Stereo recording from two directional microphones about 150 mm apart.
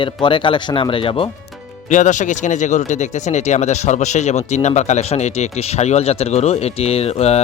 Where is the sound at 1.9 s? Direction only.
55° left (ahead or behind).